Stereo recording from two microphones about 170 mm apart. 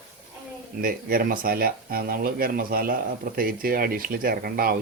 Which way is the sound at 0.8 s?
60° right (ahead or behind).